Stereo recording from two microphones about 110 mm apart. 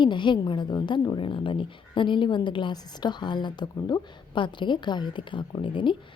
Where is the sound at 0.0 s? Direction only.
45° left (ahead or behind).